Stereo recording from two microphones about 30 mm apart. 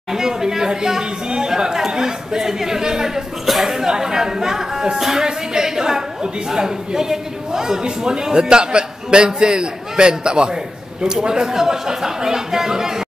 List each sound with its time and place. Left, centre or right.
0.1 s speech: centre
3.4 s speech: centre
3.7 s speech: centre
5.2 s a sound: right
6.5 s a man's voice: right